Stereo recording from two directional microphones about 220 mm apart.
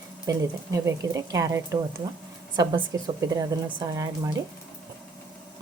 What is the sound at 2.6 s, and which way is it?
A woman's voice, 15° right (ahead or behind).